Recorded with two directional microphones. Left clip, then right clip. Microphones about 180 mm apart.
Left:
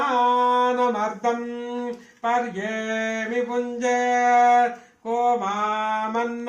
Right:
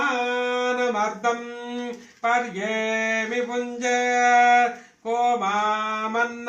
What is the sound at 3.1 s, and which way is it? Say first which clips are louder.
Music: right 1 dB; 30° right (ahead or behind).